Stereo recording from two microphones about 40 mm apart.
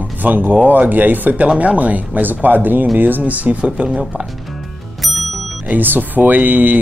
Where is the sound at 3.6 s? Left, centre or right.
Right.